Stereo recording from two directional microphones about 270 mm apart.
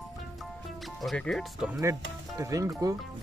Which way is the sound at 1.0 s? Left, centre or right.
Centre.